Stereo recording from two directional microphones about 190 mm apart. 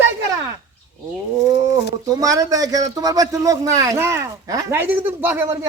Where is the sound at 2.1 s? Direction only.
20° right (ahead or behind).